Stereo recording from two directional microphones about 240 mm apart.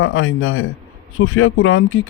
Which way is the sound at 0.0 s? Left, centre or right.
Left.